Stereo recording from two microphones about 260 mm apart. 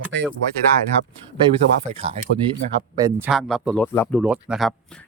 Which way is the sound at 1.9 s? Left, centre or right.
Right.